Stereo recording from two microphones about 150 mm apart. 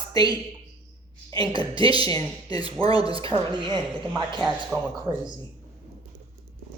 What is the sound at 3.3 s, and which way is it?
A woman's voice, 30° right (ahead or behind).